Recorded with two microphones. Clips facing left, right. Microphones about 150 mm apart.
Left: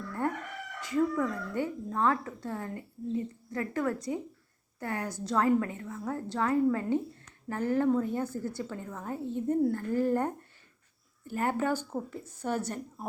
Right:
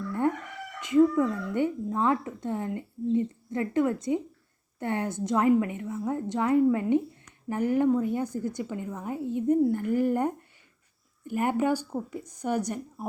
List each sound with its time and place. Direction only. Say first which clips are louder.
0.8 s a woman's voice: right 7 dB; 20° right (ahead or behind)